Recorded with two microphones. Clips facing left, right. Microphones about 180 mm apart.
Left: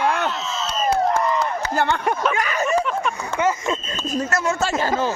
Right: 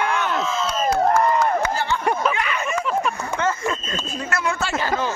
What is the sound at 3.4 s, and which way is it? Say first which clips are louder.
Speech: left 3 dB; 15° left (ahead or behind).